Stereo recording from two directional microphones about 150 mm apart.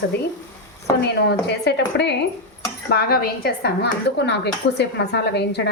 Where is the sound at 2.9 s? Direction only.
90° left.